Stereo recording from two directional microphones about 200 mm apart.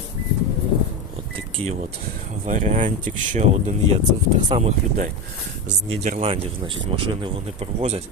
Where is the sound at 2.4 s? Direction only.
40° right (ahead or behind).